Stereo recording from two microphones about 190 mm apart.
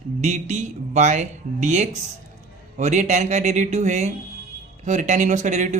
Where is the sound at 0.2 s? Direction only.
35° right (ahead or behind).